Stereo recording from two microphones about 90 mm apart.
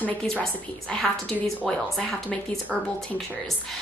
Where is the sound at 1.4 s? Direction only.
5° left (ahead or behind).